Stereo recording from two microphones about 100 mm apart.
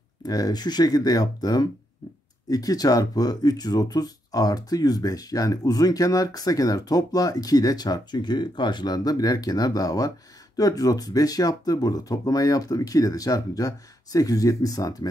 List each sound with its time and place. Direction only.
0.2 s speech: 40° left (ahead or behind)